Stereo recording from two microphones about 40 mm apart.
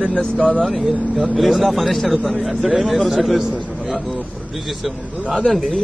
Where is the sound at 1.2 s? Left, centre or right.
Centre.